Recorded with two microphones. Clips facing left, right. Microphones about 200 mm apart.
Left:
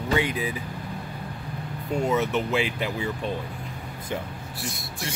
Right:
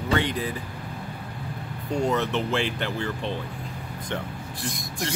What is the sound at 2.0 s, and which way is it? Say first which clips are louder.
Speech: left 1 dB; 5° left (ahead or behind).